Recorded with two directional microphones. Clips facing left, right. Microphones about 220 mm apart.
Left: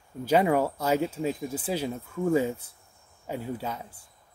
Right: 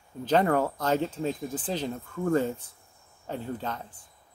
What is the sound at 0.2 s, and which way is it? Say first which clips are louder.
Speech: left 1 dB; 10° left (ahead or behind).